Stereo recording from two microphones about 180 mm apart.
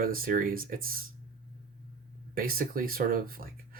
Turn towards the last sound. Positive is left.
turn(degrees=-55)  # may be behind; listen again after turning